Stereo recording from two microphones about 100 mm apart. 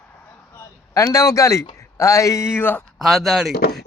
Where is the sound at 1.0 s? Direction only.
30° left (ahead or behind).